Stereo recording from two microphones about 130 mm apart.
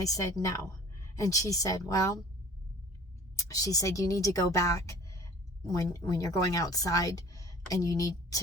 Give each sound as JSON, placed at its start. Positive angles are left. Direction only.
{"t": 0.0, "sound": "speech", "side_deg": 25}
{"t": 3.3, "sound": "speech", "side_deg": 25}